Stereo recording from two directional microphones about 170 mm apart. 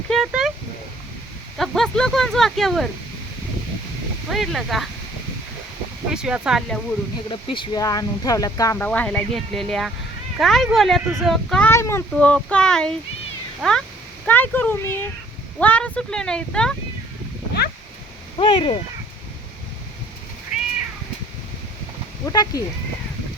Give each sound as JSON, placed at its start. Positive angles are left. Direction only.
{"t": 0.3, "sound": "a sound", "side_deg": -5}
{"t": 1.5, "sound": "speech", "side_deg": 0}
{"t": 4.3, "sound": "speech", "side_deg": 0}
{"t": 6.1, "sound": "speech", "side_deg": -5}
{"t": 7.3, "sound": "speech", "side_deg": 30}
{"t": 8.9, "sound": "speech", "side_deg": 5}
{"t": 11.7, "sound": "a child's voice", "side_deg": 15}
{"t": 18.3, "sound": "speech", "side_deg": 30}
{"t": 20.5, "sound": "cat", "side_deg": -5}
{"t": 22.3, "sound": "speech", "side_deg": 20}